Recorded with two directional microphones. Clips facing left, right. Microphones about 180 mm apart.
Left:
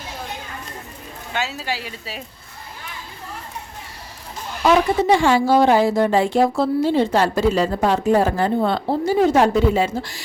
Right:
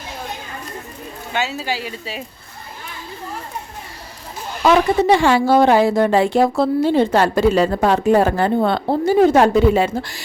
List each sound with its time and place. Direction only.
1.3 s speech: centre (ahead or behind)
5.0 s speech: 65° right (ahead or behind)